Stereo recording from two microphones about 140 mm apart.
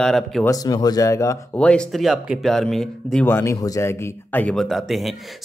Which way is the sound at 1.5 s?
10° left (ahead or behind).